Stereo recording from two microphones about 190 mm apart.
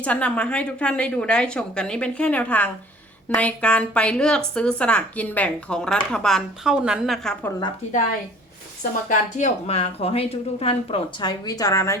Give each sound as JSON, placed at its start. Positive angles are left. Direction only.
{"t": 0.0, "sound": "a woman's voice", "side_deg": 5}
{"t": 8.8, "sound": "speech", "side_deg": 40}